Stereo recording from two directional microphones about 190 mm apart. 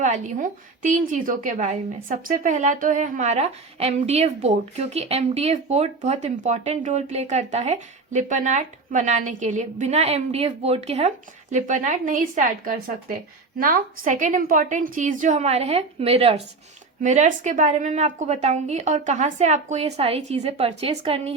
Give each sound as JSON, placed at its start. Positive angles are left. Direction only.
{"t": 0.0, "sound": "a woman's voice", "side_deg": -40}